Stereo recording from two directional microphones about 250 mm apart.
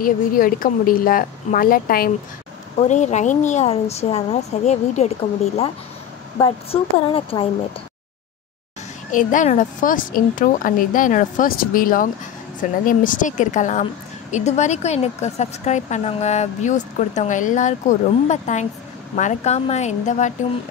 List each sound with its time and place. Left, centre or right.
0.0 s a woman's voice: left
9.1 s a woman's voice: left